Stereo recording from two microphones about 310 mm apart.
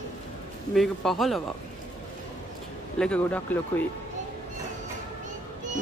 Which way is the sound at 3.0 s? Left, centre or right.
Centre.